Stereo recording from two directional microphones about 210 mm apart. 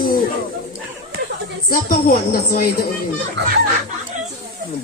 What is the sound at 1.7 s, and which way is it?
A man's voice, 45° left (ahead or behind).